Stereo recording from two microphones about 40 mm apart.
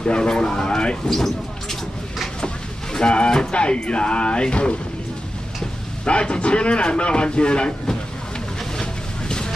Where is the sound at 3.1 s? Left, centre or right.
Left.